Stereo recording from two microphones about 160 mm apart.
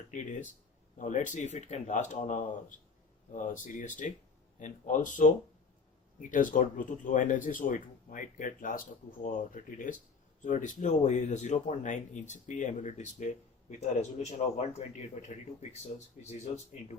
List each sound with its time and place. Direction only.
0.1 s speech: 50° left (ahead or behind)